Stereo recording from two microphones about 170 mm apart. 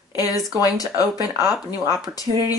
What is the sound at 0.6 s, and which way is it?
Speech, 20° left (ahead or behind).